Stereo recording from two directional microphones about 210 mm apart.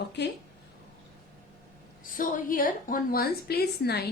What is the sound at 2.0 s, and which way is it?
A woman's voice, 40° left (ahead or behind).